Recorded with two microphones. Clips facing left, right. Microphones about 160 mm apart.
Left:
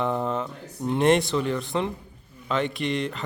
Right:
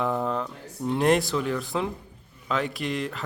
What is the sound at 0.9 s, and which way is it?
Speech, centre (ahead or behind).